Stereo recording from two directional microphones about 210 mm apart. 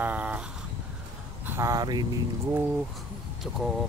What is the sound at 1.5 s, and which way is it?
Speech, 15° right (ahead or behind).